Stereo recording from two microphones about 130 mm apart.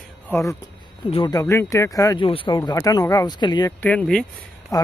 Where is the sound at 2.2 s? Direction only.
40° left (ahead or behind).